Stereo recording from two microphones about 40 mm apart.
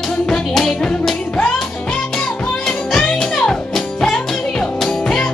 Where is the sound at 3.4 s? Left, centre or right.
Centre.